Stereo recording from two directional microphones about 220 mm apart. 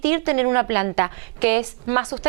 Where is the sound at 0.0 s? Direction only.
15° right (ahead or behind).